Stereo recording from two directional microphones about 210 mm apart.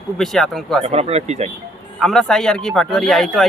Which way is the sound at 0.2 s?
Centre (ahead or behind).